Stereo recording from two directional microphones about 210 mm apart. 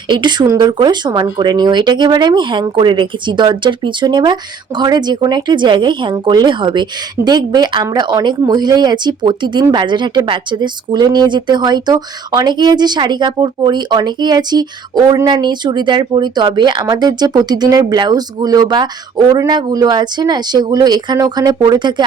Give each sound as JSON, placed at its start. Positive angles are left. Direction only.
{"t": 0.1, "sound": "a woman's voice", "side_deg": -20}